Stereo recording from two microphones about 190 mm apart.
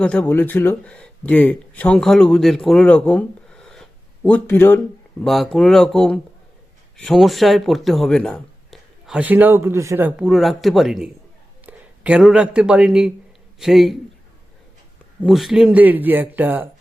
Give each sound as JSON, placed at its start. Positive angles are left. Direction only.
{"t": 0.0, "sound": "speech", "side_deg": 5}
{"t": 5.2, "sound": "speech", "side_deg": 0}
{"t": 15.2, "sound": "speech", "side_deg": 0}